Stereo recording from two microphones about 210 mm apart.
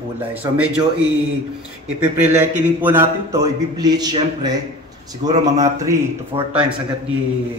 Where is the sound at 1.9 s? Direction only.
10° right (ahead or behind).